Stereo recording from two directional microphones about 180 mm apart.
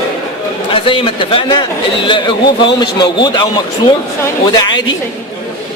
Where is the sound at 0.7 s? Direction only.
30° left (ahead or behind).